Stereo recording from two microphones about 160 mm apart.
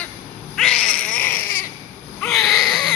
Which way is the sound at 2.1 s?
Centre (ahead or behind).